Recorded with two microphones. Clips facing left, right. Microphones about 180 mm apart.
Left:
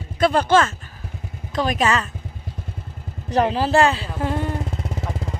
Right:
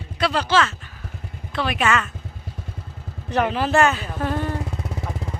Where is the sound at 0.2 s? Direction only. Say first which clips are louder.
Left 4 dB; 50° left (ahead or behind).